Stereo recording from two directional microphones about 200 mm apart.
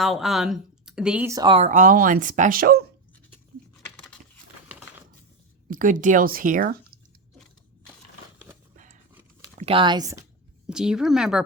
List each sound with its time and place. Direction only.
0.0 s speech: centre (ahead or behind)
1.3 s speech: 20° right (ahead or behind)
1.7 s speech: 45° right (ahead or behind)
5.7 s speech: 40° right (ahead or behind)
8.7 s a sound: 40° right (ahead or behind)
9.6 s speech: 25° right (ahead or behind)
10.7 s speech: 5° right (ahead or behind)